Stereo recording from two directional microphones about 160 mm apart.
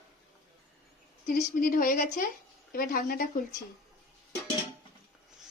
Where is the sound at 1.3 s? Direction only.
60° left (ahead or behind).